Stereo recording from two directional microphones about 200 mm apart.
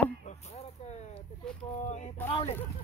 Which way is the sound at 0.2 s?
35° left (ahead or behind).